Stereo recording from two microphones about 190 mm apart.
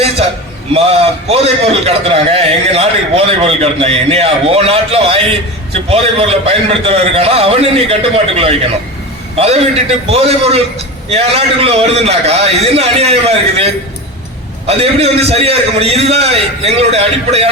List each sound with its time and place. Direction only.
0.7 s a man's voice: 30° right (ahead or behind)
14.7 s a man's voice: 30° right (ahead or behind)